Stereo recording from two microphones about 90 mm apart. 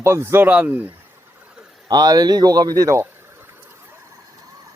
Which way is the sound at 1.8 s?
50° right (ahead or behind).